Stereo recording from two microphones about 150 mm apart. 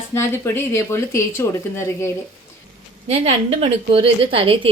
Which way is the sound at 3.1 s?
40° right (ahead or behind).